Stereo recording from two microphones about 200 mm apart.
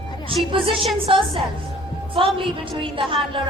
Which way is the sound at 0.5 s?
25° right (ahead or behind).